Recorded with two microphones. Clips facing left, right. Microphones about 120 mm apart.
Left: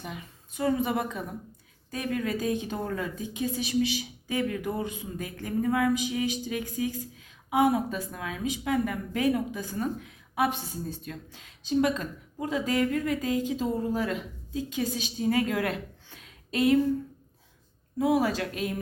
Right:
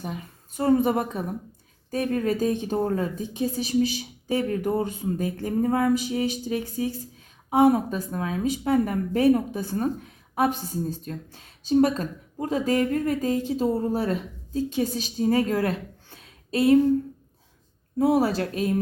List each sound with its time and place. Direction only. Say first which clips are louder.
0.0 s speech: right 5 dB; 40° right (ahead or behind)
17.9 s speech: right 4 dB; 40° right (ahead or behind)